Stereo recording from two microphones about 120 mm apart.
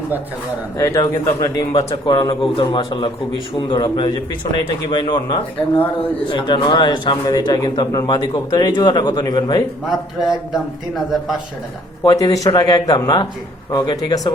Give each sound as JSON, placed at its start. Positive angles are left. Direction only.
{"t": 0.8, "sound": "a man's voice", "side_deg": 30}
{"t": 2.0, "sound": "a man's voice", "side_deg": 40}
{"t": 9.8, "sound": "a man's voice", "side_deg": 0}
{"t": 12.0, "sound": "a man's voice", "side_deg": 30}